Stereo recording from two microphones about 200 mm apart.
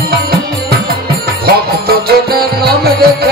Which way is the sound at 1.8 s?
50° right (ahead or behind).